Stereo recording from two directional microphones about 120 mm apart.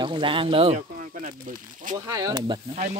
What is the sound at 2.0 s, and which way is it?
Speech, 30° right (ahead or behind).